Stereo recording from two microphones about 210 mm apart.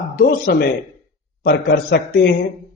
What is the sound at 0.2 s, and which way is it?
A man's voice, 45° left (ahead or behind).